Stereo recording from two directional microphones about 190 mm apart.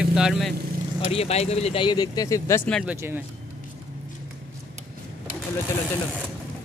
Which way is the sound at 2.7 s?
Centre (ahead or behind).